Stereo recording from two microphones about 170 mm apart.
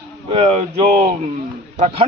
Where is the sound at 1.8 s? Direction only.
35° right (ahead or behind).